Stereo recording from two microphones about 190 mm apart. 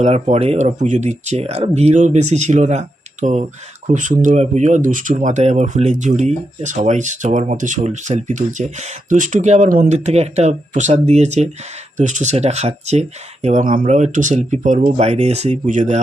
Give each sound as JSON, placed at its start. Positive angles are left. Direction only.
{"t": 0.0, "sound": "speech", "side_deg": -35}